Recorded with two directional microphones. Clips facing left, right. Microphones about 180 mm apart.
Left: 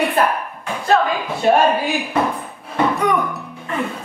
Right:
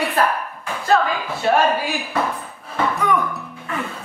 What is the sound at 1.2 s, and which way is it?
Speech, 20° left (ahead or behind).